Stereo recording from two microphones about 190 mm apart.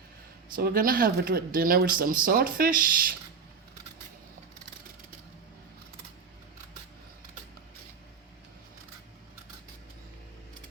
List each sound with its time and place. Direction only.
0.5 s speech: 50° right (ahead or behind)